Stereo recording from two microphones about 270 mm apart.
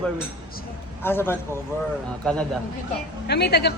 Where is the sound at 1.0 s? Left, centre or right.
Centre.